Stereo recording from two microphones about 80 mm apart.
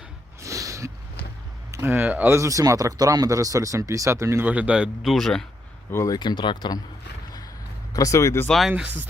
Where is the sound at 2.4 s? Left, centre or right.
Right.